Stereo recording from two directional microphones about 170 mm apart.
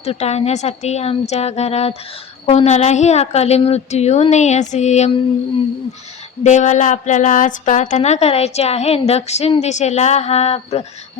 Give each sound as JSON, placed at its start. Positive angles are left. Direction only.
{"t": 0.0, "sound": "speech", "side_deg": 40}
{"t": 6.4, "sound": "speech", "side_deg": 45}